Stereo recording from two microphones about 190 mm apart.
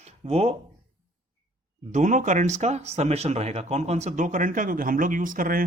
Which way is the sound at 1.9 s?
40° right (ahead or behind).